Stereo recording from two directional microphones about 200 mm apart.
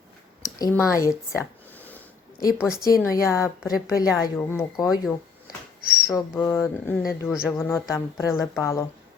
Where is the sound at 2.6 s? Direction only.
5° right (ahead or behind).